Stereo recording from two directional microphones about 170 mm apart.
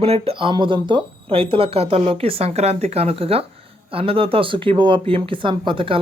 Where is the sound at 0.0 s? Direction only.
35° right (ahead or behind).